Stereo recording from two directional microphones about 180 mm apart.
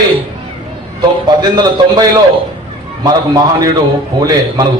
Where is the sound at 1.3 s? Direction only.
25° right (ahead or behind).